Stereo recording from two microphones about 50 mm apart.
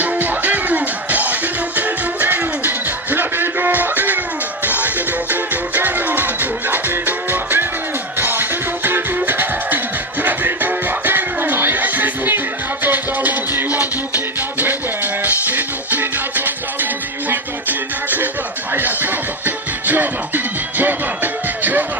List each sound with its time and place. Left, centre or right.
0.0 s music: right